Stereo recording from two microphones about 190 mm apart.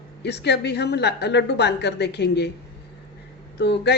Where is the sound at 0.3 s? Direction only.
60° left (ahead or behind).